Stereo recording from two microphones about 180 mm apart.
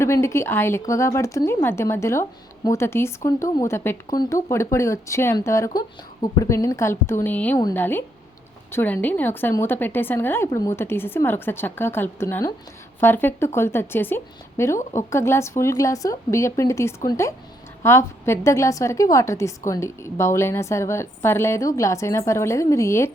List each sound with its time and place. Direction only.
0.0 s a woman's voice: 15° left (ahead or behind)